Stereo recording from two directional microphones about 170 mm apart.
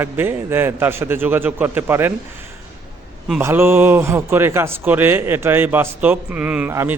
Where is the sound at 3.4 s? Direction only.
15° right (ahead or behind).